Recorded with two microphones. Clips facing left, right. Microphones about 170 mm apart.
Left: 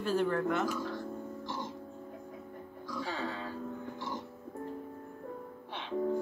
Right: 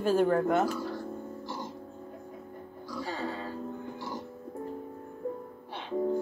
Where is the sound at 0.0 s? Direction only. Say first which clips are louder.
Right 6 dB; 45° right (ahead or behind).